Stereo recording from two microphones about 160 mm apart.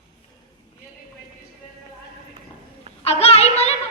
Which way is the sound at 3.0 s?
40° left (ahead or behind).